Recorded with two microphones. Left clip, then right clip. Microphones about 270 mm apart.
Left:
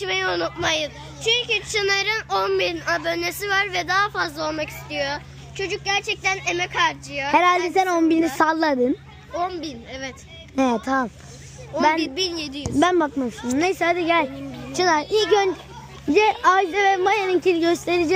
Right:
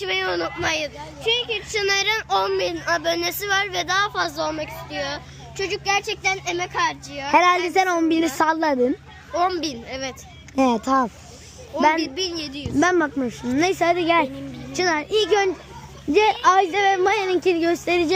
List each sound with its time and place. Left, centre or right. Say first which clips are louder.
0.0 s a woman's voice: even; centre
9.3 s a woman's voice: right 4 dB; right
10.5 s a woman's voice: right 2 dB; centre